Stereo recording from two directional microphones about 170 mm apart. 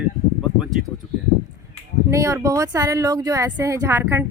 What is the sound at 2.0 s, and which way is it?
Speech, 20° right (ahead or behind).